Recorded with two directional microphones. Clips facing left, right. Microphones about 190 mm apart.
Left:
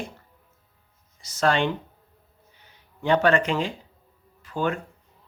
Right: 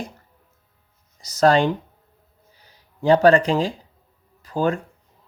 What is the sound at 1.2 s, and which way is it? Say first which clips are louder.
Speech: right 6 dB; 40° right (ahead or behind).